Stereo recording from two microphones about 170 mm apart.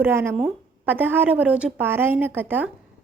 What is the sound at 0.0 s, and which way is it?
A woman's voice, 15° right (ahead or behind).